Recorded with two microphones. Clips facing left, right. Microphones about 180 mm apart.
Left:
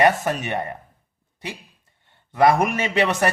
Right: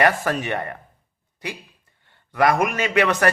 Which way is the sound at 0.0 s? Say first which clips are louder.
Left 1 dB; 20° left (ahead or behind).